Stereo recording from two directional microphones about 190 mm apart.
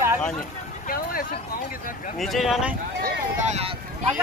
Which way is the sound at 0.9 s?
50° left (ahead or behind).